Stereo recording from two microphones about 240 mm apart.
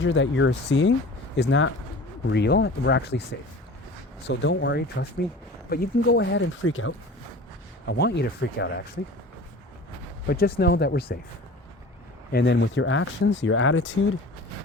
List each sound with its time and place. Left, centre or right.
0.0 s speech: left
4.3 s speech: left
7.9 s speech: left
10.2 s speech: left
12.3 s speech: left